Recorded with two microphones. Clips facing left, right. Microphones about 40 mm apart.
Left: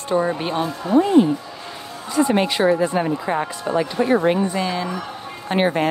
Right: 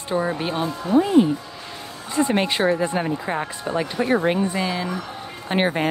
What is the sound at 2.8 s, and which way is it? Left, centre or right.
Speech, centre.